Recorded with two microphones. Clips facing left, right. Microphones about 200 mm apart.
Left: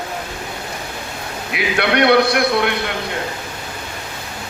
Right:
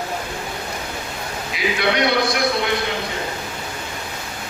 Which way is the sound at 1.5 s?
60° left (ahead or behind).